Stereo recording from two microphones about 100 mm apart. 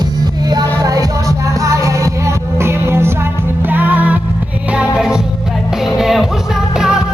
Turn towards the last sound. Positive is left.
turn(degrees=-5)  # may be behind; listen again after turning